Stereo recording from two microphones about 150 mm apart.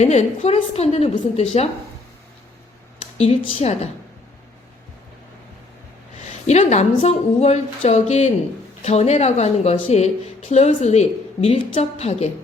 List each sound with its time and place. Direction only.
0.0 s a woman's voice: 50° left (ahead or behind)
3.0 s a woman's voice: 45° left (ahead or behind)
6.4 s a woman's voice: 50° left (ahead or behind)